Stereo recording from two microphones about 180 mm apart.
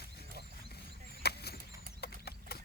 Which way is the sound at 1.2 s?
65° left (ahead or behind).